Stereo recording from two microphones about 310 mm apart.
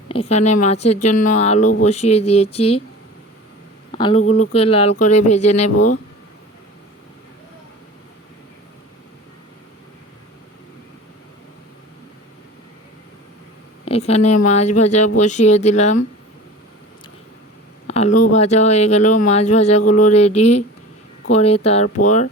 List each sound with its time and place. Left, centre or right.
0.1 s speech: centre
2.6 s speech: left
3.9 s speech: centre
4.2 s speech: left
4.4 s speech: centre
13.8 s speech: centre
17.8 s speech: left
21.8 s speech: left